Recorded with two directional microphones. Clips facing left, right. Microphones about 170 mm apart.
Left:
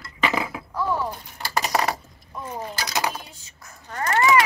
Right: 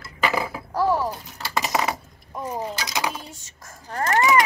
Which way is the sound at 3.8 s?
35° right (ahead or behind).